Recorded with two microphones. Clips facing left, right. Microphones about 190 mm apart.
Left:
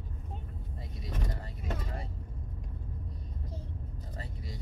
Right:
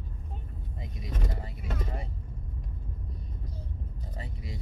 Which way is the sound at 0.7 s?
10° right (ahead or behind).